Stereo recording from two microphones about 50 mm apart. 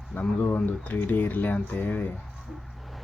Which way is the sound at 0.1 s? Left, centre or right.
Left.